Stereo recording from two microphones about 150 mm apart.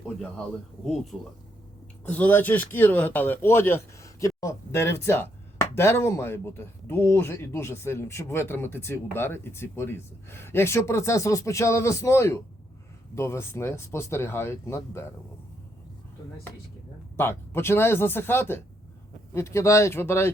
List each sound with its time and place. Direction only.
2.0 s speech: 10° left (ahead or behind)
17.2 s speech: 15° left (ahead or behind)